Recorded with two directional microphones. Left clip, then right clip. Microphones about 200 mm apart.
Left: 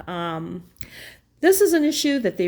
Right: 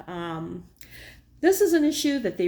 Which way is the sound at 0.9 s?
35° left (ahead or behind).